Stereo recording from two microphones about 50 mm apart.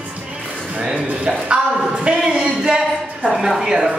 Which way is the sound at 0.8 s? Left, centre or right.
Right.